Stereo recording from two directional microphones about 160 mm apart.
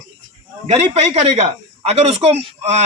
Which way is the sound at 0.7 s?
40° right (ahead or behind).